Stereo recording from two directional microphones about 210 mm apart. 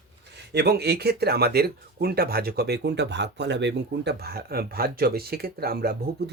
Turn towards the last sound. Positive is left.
turn(degrees=-45)  # may be behind; listen again after turning